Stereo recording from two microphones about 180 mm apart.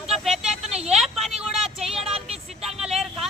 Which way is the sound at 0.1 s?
Centre (ahead or behind).